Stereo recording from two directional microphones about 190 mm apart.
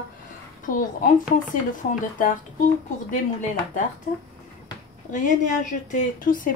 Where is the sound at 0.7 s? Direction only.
45° left (ahead or behind).